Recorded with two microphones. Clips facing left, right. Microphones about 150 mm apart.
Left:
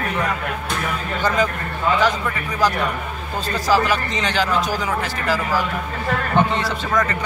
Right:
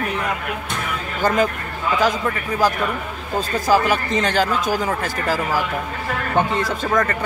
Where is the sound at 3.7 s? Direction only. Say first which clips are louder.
Right 1 dB; 50° right (ahead or behind).